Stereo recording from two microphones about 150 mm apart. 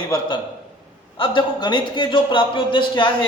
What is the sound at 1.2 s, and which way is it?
A man's voice, 30° left (ahead or behind).